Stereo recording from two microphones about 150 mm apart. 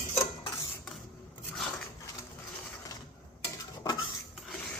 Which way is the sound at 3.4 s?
25° left (ahead or behind).